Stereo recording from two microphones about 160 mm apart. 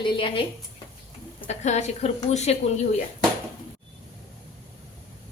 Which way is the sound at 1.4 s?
45° left (ahead or behind).